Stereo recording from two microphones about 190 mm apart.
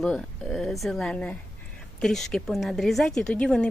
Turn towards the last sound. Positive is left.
turn(degrees=5)  # may be behind; listen again after turning